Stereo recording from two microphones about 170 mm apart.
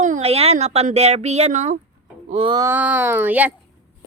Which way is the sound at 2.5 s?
15° right (ahead or behind).